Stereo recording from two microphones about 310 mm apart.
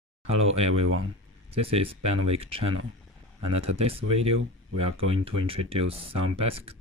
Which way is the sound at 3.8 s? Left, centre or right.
Centre.